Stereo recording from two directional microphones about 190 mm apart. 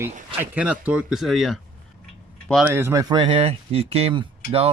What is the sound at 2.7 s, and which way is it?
A man's voice, 15° right (ahead or behind).